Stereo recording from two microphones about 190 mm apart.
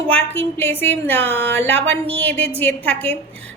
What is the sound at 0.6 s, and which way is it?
A woman's voice, 10° left (ahead or behind).